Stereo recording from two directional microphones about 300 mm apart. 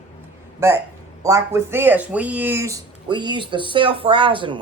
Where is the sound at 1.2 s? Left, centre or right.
Centre.